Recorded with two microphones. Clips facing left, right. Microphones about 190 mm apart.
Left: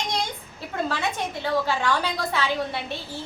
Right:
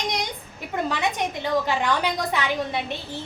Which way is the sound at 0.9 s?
15° right (ahead or behind).